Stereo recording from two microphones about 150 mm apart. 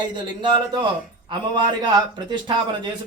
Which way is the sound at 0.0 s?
30° right (ahead or behind).